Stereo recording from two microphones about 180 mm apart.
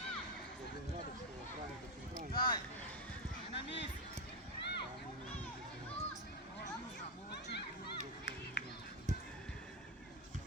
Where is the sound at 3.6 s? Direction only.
75° left (ahead or behind).